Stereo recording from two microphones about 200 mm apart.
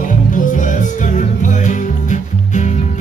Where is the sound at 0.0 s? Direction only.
40° left (ahead or behind).